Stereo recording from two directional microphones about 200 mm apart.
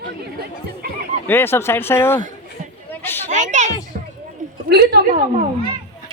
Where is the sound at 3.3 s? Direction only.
40° right (ahead or behind).